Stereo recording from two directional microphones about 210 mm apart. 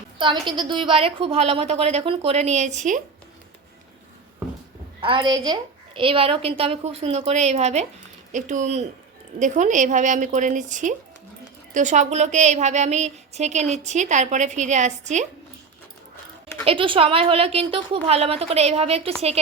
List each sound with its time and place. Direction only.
0.2 s a woman's voice: 20° right (ahead or behind)
4.9 s a woman's voice: 25° right (ahead or behind)
16.6 s a woman's voice: 25° right (ahead or behind)